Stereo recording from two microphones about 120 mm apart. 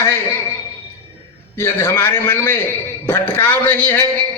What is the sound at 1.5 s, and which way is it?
A man's voice, 20° left (ahead or behind).